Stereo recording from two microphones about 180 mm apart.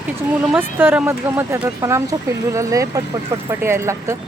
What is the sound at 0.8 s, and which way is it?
Speech, 10° right (ahead or behind).